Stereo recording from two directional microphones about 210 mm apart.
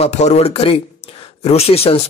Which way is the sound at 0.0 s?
30° left (ahead or behind).